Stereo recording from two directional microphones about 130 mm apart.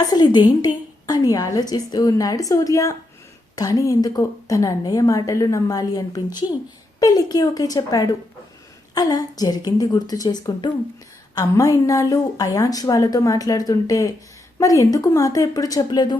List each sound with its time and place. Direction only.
0.0 s a woman's voice: 30° left (ahead or behind)